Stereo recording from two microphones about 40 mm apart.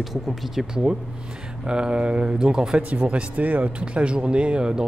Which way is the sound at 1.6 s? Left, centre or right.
Right.